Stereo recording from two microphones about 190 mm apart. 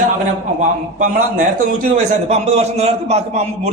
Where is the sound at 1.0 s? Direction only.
45° right (ahead or behind).